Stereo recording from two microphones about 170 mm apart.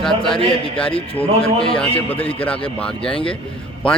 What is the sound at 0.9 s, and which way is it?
Speech, 35° left (ahead or behind).